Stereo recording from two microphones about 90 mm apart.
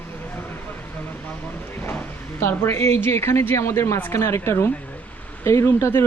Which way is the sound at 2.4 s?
25° left (ahead or behind).